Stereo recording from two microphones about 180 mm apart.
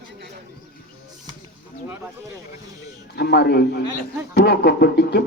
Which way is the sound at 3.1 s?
65° left (ahead or behind).